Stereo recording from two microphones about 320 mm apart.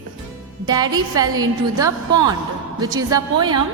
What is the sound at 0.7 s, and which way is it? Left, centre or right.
A woman's voice, centre.